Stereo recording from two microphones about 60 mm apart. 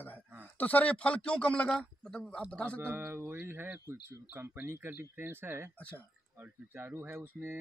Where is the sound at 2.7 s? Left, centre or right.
Right.